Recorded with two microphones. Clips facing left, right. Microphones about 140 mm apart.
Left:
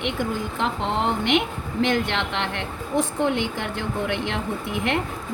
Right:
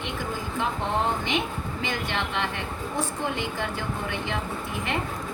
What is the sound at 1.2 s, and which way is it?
Speech, 75° left (ahead or behind).